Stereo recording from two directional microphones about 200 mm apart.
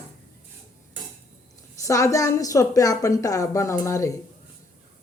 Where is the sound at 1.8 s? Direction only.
15° left (ahead or behind).